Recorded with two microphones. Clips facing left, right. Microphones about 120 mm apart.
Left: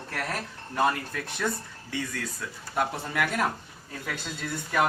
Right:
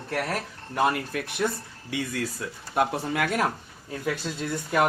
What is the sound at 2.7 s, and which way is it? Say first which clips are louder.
Speech: right 4 dB; 20° right (ahead or behind).